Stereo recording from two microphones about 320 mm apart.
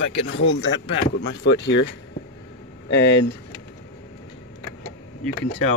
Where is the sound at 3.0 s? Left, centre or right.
Left.